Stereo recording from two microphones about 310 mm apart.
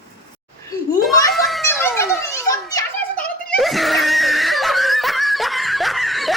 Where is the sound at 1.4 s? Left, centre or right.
Centre.